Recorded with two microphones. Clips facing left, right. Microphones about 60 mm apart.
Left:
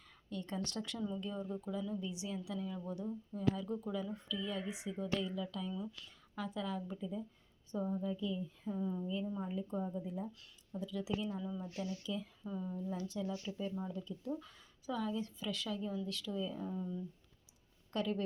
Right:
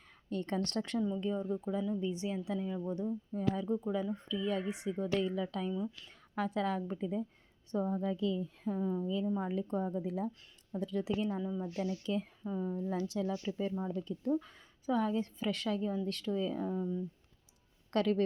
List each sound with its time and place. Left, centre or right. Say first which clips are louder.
0.3 s a woman's voice: right 6 dB; right
3.3 s a woman's voice: right 1 dB; right
3.7 s speech: right 6 dB; right
4.1 s a woman's voice: right 6 dB; right
8.0 s speech: right 5 dB; right
9.4 s speech: right 5 dB; right
10.8 s a woman's voice: right 5 dB; right
11.4 s speech: right 5 dB; right
11.7 s a woman's voice: right 6 dB; right
12.5 s a woman's voice: right 4 dB; right
14.3 s a woman's voice: right 12 dB; right
16.6 s a woman's voice: right 6 dB; right
17.9 s speech: right 6 dB; right